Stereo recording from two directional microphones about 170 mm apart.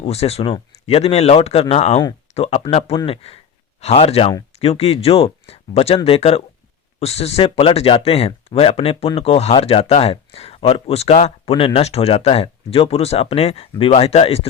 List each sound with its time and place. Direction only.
0.0 s speech: 35° left (ahead or behind)